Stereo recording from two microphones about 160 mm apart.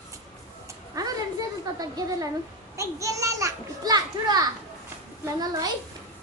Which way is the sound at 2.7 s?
20° right (ahead or behind).